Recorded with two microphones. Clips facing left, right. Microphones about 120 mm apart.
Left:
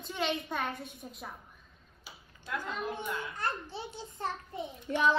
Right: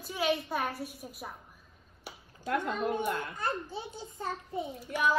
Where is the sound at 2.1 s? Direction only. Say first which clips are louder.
Right 6 dB; 65° right (ahead or behind).